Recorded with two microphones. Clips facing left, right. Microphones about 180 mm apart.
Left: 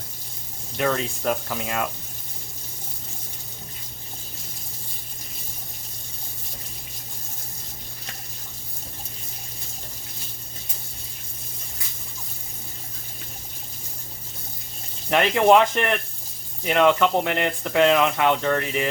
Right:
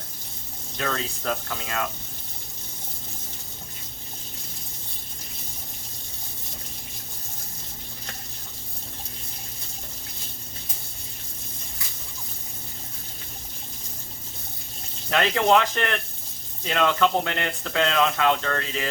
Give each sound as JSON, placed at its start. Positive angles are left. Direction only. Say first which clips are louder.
{"t": 0.8, "sound": "speech", "louder": "left 5 dB", "side_deg": 15}
{"t": 15.1, "sound": "speech", "louder": "left 4 dB", "side_deg": 20}
{"t": 16.6, "sound": "speech", "louder": "left 4 dB", "side_deg": 15}